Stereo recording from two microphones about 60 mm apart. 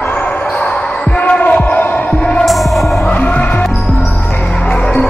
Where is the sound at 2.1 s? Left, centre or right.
Centre.